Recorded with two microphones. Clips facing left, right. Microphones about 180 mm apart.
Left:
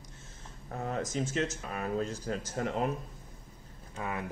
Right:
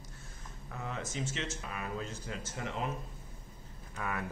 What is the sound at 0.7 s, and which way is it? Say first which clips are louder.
Speech: left 6 dB; 45° left (ahead or behind).